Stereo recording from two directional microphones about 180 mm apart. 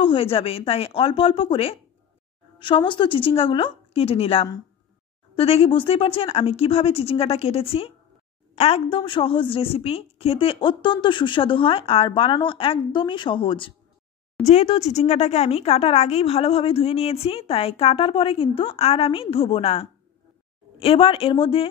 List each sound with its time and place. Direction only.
0.0 s a woman's voice: 30° left (ahead or behind)